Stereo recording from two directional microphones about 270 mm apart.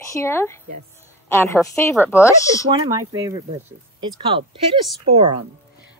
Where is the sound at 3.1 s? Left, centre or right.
Centre.